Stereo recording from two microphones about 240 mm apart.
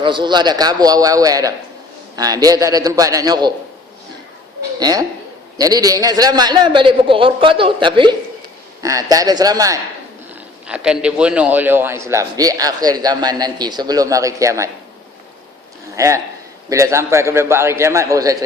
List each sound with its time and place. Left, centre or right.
0.0 s a man's voice: centre
4.8 s a man's voice: centre
10.7 s a man's voice: centre
16.0 s a man's voice: centre